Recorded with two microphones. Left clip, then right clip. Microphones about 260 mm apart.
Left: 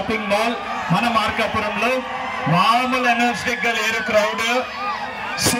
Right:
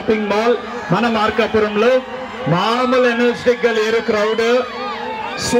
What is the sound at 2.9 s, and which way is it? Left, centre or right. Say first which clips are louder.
A man's voice: right 4 dB; right.